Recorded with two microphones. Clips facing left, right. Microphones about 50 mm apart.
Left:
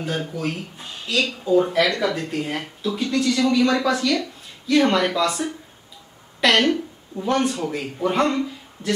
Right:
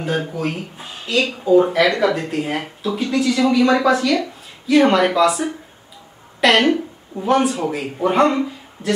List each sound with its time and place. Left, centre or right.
0.0 s speech: centre